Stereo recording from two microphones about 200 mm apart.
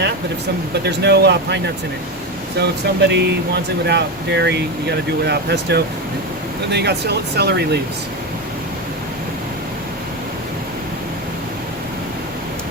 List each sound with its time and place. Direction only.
0.7 s speech: 55° right (ahead or behind)